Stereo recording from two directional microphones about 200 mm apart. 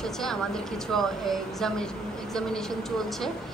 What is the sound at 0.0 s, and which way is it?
A woman's voice, centre (ahead or behind).